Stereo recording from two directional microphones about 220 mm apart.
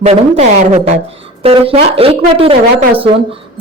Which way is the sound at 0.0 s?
30° right (ahead or behind).